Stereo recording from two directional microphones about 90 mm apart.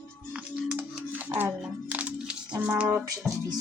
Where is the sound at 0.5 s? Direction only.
15° right (ahead or behind).